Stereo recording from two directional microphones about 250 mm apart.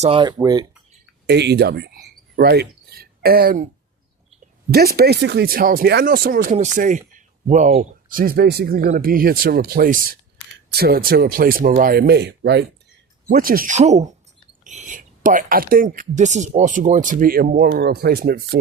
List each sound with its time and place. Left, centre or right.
0.0 s speech: right
1.3 s speech: right
4.7 s speech: right